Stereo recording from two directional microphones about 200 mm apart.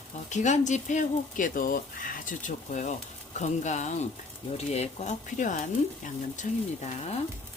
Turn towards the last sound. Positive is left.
turn(degrees=35)  # may be behind; listen again after turning